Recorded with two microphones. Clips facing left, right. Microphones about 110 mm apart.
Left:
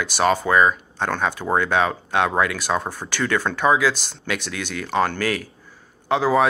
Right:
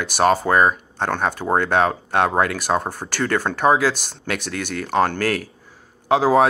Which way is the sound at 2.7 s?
25° right (ahead or behind).